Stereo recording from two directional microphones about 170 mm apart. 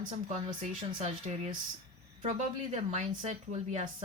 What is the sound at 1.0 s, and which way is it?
Speech, 40° right (ahead or behind).